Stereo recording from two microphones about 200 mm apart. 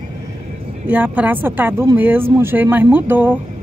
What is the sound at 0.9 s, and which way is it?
Speech, 10° right (ahead or behind).